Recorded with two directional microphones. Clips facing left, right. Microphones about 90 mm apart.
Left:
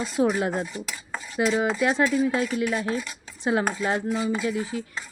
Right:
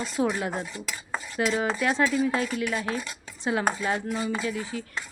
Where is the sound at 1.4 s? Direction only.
15° left (ahead or behind).